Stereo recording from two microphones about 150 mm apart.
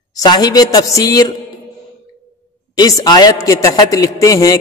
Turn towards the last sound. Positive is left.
turn(degrees=20)  # may be behind; listen again after turning